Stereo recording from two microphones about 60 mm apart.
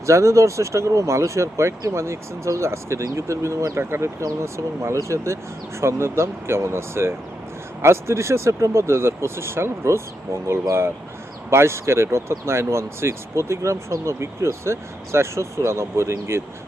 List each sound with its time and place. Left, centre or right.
0.0 s speech: right
3.8 s speech: right